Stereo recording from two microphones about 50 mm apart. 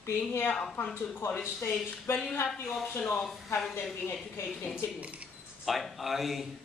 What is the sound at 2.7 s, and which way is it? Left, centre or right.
Speech, centre.